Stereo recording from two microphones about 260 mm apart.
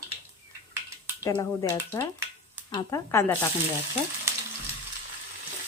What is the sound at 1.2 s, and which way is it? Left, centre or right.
Frying, centre.